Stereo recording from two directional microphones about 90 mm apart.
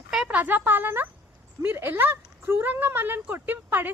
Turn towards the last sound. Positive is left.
turn(degrees=-20)  # may be behind; listen again after turning